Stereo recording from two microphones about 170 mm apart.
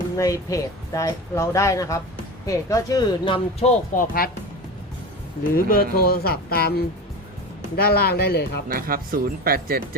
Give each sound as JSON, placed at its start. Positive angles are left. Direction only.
{"t": 0.2, "sound": "speech", "side_deg": 20}
{"t": 3.9, "sound": "speech", "side_deg": 55}
{"t": 5.5, "sound": "speech", "side_deg": 60}
{"t": 8.7, "sound": "speech", "side_deg": -60}